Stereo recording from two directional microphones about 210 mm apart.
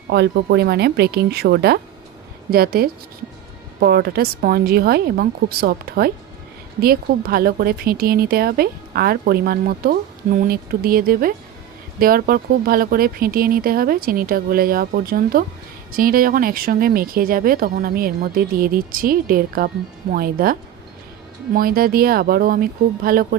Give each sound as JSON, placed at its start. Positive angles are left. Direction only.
{"t": 0.1, "sound": "a woman's voice", "side_deg": -55}